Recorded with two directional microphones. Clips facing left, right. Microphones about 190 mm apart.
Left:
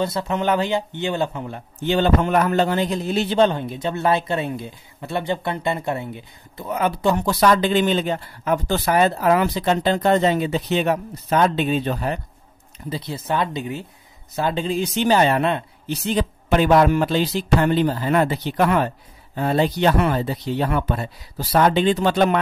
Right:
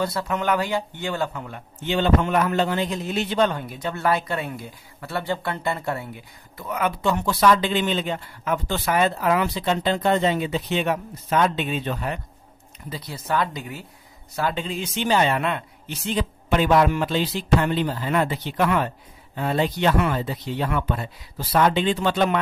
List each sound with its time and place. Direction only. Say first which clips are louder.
0.0 s speech: left 3 dB; 20° left (ahead or behind)
1.8 s a man's voice: left 2 dB; 40° left (ahead or behind)
12.9 s a man's voice: left 2 dB; 25° left (ahead or behind); by 22.4 s 40° left (ahead or behind)